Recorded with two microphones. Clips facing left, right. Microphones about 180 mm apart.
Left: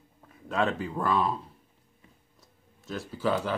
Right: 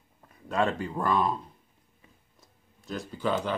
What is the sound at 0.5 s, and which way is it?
Speech, centre (ahead or behind).